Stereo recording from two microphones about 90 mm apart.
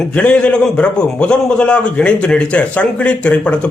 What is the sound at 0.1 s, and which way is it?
A man's voice, 15° left (ahead or behind).